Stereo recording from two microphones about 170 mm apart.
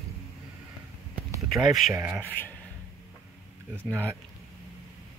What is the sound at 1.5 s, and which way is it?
Speech, centre (ahead or behind).